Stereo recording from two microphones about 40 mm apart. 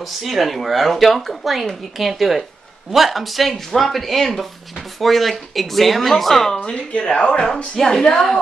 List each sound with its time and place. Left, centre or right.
0.0 s speech: centre
6.6 s a woman's voice: left